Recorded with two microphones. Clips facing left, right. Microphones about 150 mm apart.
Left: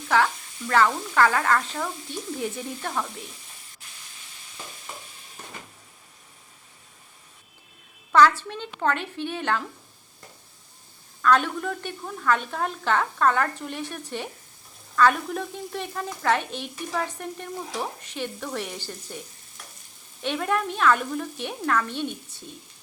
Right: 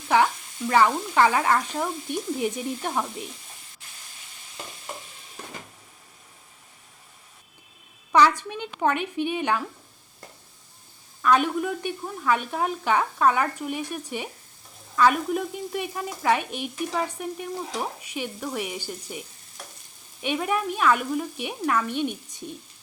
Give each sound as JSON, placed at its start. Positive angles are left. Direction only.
{"t": 0.1, "sound": "a woman's voice", "side_deg": -15}
{"t": 8.1, "sound": "a woman's voice", "side_deg": -15}
{"t": 11.2, "sound": "a woman's voice", "side_deg": -10}
{"t": 20.2, "sound": "a woman's voice", "side_deg": -10}